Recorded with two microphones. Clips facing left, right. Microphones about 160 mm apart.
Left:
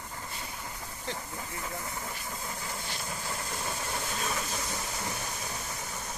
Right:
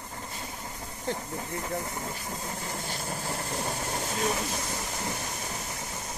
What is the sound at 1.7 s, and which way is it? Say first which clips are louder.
Speech: right 5 dB; 20° right (ahead or behind).